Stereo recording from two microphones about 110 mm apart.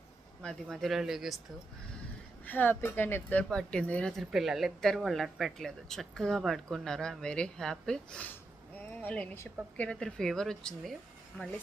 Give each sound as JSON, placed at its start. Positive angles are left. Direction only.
{"t": 0.4, "sound": "speech", "side_deg": 5}
{"t": 2.4, "sound": "speech", "side_deg": 15}
{"t": 4.2, "sound": "speech", "side_deg": 0}